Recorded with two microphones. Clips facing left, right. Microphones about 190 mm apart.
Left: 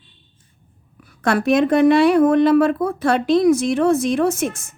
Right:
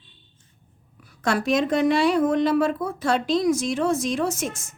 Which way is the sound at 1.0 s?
60° left (ahead or behind).